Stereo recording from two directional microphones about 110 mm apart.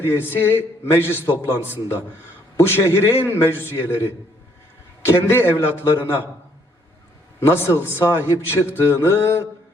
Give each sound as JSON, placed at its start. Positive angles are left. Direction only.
{"t": 0.0, "sound": "a man's voice", "side_deg": 20}
{"t": 2.6, "sound": "a man's voice", "side_deg": 20}
{"t": 7.3, "sound": "a man's voice", "side_deg": 25}